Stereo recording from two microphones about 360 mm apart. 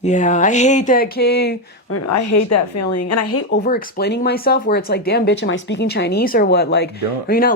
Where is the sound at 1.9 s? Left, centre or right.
Left.